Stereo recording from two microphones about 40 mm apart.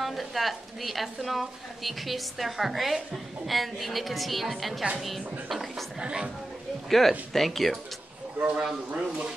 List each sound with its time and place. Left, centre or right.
0.0 s a woman's voice: centre
5.9 s speech: centre
6.9 s a woman's voice: centre
8.5 s speech: right